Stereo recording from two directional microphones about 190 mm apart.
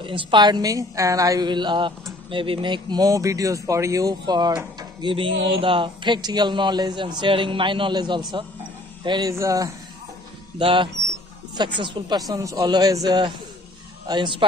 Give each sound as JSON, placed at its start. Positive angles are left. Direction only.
{"t": 0.0, "sound": "a man's voice", "side_deg": -25}
{"t": 10.6, "sound": "a man's voice", "side_deg": -25}